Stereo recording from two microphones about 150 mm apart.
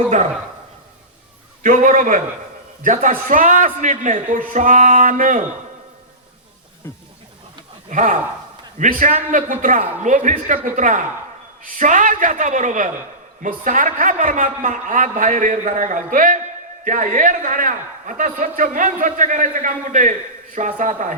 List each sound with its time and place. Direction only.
1.6 s a man's voice: 60° right (ahead or behind)
6.8 s speech: 15° left (ahead or behind)
7.9 s a man's voice: 60° right (ahead or behind)
9.8 s a man's voice: 50° right (ahead or behind)